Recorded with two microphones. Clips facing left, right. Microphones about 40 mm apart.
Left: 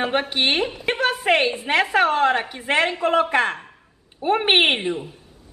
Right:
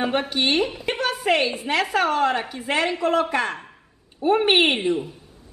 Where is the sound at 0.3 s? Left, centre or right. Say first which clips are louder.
Even; left.